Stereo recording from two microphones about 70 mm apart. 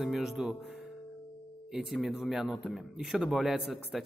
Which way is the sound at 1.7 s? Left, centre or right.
Centre.